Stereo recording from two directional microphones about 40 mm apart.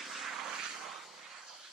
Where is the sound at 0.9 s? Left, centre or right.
Centre.